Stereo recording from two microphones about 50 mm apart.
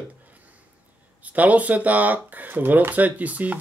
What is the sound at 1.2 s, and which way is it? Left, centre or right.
Speech, right.